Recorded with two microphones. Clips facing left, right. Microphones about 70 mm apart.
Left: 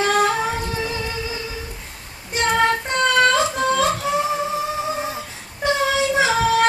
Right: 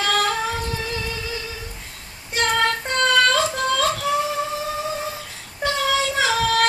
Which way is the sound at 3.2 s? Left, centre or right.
Left.